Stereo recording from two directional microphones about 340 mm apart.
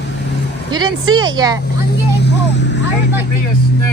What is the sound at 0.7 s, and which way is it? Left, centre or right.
Speech, centre.